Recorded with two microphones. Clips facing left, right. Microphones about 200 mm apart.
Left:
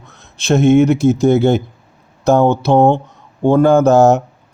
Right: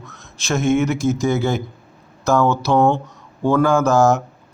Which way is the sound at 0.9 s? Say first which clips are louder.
Left 7 dB; 60° left (ahead or behind).